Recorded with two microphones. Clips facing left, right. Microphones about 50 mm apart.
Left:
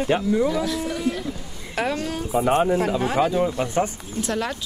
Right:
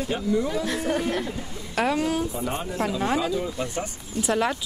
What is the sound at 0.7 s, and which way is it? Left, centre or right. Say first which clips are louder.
Speech: even; right.